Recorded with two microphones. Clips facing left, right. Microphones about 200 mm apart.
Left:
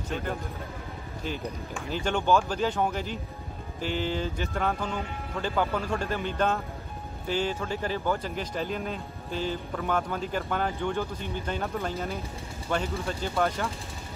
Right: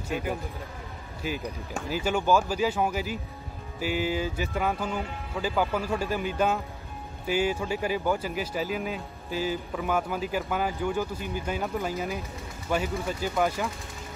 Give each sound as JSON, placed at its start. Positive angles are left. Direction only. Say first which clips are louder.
{"t": 0.1, "sound": "speech", "louder": "right 2 dB", "side_deg": -10}
{"t": 1.8, "sound": "speech", "louder": "right 2 dB", "side_deg": -5}